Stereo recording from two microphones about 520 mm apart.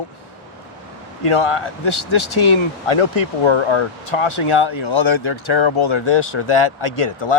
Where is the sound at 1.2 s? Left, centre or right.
Left.